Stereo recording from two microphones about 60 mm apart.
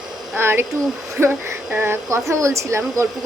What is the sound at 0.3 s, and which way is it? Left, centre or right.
A woman's voice, right.